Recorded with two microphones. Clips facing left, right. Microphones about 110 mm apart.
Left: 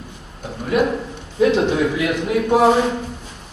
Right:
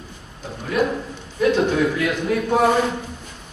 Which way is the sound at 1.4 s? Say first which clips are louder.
Left 2 dB; 20° left (ahead or behind).